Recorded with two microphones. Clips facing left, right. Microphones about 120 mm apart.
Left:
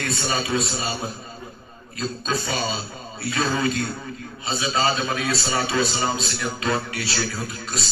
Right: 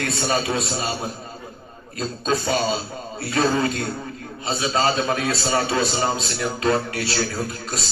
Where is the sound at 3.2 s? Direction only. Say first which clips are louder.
Right 3 dB; 40° right (ahead or behind).